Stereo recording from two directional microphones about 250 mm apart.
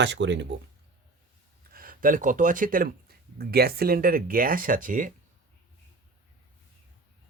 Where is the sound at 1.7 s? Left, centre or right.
Right.